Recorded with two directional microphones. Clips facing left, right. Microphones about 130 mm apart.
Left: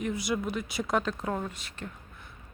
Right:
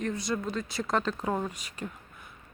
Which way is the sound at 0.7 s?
Centre (ahead or behind).